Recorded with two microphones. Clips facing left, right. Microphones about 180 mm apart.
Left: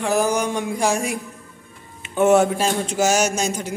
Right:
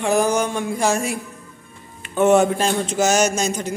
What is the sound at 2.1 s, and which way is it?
Speech, 5° left (ahead or behind).